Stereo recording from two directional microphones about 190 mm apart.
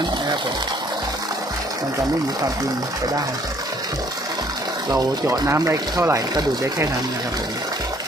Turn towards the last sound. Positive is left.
turn(degrees=-15)  # may be behind; listen again after turning